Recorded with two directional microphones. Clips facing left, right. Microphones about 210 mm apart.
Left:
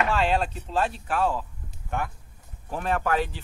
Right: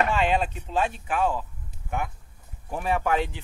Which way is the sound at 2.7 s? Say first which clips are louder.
Right 1 dB; 10° right (ahead or behind).